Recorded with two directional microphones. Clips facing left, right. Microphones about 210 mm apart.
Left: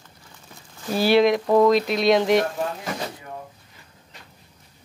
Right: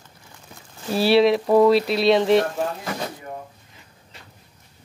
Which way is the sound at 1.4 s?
10° right (ahead or behind).